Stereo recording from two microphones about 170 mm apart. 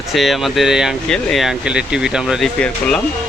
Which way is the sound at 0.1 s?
Centre (ahead or behind).